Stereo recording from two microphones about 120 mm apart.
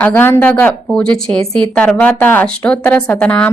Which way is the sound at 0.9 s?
5° left (ahead or behind).